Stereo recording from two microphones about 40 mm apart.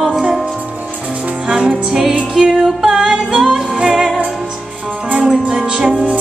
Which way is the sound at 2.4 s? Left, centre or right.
Right.